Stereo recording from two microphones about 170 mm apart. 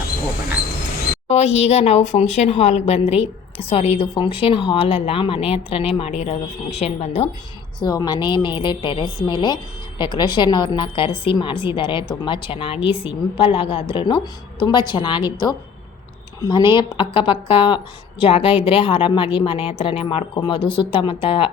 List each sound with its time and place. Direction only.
1.3 s speech: 40° left (ahead or behind)
7.8 s a woman's voice: 25° left (ahead or behind)